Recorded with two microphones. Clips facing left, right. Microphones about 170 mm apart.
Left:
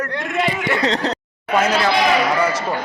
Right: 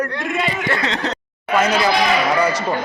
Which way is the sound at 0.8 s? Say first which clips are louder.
Left 3 dB; 35° left (ahead or behind).